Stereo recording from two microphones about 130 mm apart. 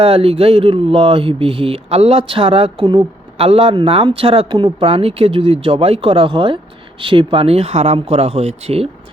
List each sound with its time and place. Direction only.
0.0 s speech: 50° right (ahead or behind)